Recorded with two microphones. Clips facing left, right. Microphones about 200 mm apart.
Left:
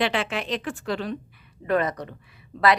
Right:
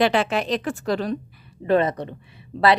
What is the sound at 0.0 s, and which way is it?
A woman's voice, 40° right (ahead or behind).